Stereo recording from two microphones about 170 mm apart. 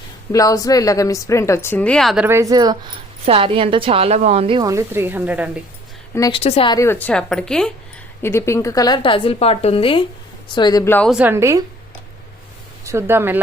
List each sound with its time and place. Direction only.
0.3 s a woman's voice: 20° left (ahead or behind); by 2.2 s centre (ahead or behind)
2.2 s a woman's voice: 15° right (ahead or behind)
4.7 s a woman's voice: 15° right (ahead or behind)
6.3 s a woman's voice: 35° left (ahead or behind)
6.7 s a woman's voice: 15° left (ahead or behind)
8.2 s a woman's voice: 15° left (ahead or behind)
11.1 s a woman's voice: 10° right (ahead or behind)
12.8 s speech: 15° right (ahead or behind)